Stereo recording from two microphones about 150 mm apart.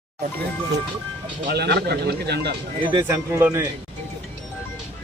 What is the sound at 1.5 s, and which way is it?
Speech, 90° right.